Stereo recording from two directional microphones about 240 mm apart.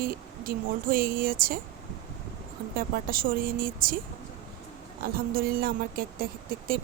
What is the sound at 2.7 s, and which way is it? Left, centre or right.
A woman's voice, right.